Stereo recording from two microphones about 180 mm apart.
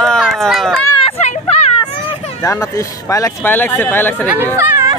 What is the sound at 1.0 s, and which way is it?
Hubbub, 35° left (ahead or behind).